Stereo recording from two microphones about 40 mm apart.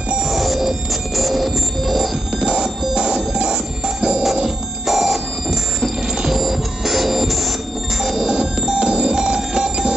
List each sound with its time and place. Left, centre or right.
0.2 s music: centre
2.3 s music: centre
4.8 s music: centre
8.0 s a sound: centre